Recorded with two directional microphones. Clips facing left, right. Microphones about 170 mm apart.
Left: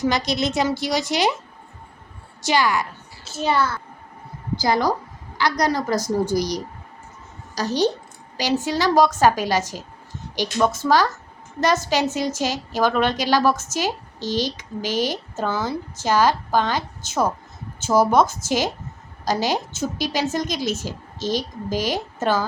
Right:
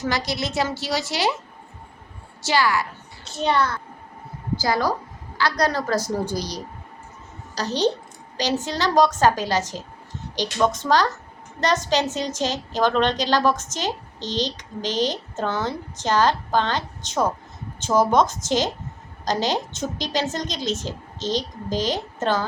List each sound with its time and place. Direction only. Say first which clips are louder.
0.0 s a woman's voice: left 4 dB; 20° left (ahead or behind)
2.4 s a woman's voice: left 1 dB; 15° left (ahead or behind)
3.2 s a child's voice: even; 5° left (ahead or behind)
4.6 s a woman's voice: left 3 dB; 20° left (ahead or behind)